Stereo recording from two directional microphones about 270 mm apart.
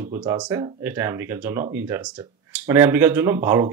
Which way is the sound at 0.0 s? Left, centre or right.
Centre.